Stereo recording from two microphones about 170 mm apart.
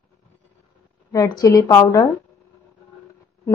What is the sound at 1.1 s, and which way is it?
Speech, 20° left (ahead or behind).